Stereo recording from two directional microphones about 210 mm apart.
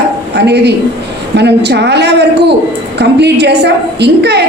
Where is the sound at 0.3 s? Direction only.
55° right (ahead or behind).